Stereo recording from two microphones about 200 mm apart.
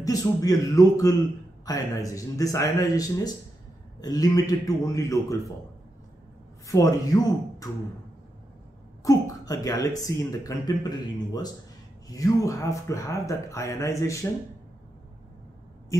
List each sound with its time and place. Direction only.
0.0 s speech: 15° left (ahead or behind)
6.7 s speech: 15° left (ahead or behind)
9.0 s speech: 15° left (ahead or behind)
12.1 s speech: 15° left (ahead or behind)